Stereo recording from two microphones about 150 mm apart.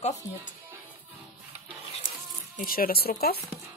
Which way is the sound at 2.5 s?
75° left (ahead or behind).